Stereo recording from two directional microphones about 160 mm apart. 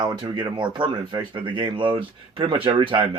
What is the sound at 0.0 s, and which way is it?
Speech, 25° right (ahead or behind).